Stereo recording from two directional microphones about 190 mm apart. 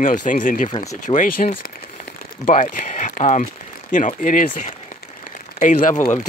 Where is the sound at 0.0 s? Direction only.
45° left (ahead or behind).